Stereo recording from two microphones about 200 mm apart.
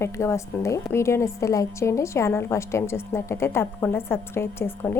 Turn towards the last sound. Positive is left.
turn(degrees=10)  # may be behind; listen again after turning